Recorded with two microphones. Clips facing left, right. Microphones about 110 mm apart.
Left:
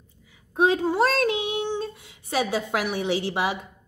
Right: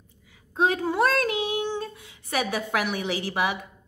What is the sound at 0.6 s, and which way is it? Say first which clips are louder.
A child's voice: left 2 dB; 20° left (ahead or behind).